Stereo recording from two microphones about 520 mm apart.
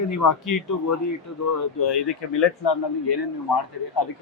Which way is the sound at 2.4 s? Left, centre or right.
Left.